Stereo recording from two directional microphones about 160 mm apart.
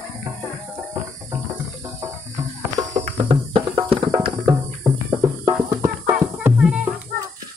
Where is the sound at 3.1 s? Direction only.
30° right (ahead or behind); by 6.8 s 5° right (ahead or behind).